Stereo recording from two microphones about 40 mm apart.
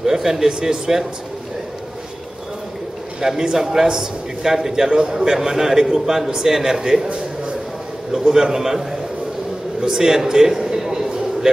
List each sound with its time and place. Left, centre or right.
0.0 s a man's voice: centre
3.2 s a man's voice: centre
8.1 s a man's voice: centre
9.8 s a sound: centre